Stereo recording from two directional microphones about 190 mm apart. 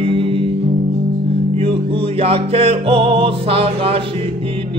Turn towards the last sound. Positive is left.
turn(degrees=-30)  # may be behind; listen again after turning